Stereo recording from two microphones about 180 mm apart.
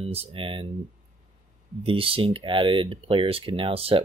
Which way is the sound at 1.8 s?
30° right (ahead or behind).